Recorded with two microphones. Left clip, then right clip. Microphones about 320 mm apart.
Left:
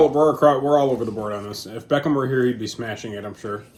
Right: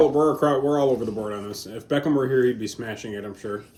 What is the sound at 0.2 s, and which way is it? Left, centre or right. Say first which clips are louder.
Speech: left 4 dB; left.